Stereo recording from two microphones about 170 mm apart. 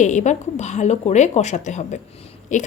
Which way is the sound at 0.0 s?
45° left (ahead or behind).